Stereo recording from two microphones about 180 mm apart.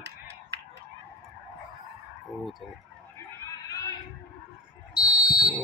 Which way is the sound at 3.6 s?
20° left (ahead or behind).